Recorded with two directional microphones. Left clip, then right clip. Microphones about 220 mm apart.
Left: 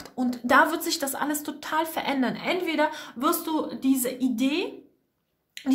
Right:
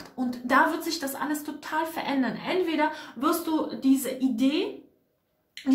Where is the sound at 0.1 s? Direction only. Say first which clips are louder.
Left 3 dB; 45° left (ahead or behind).